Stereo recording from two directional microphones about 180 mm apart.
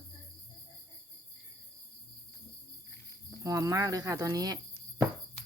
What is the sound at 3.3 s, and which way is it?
Speech, 20° right (ahead or behind).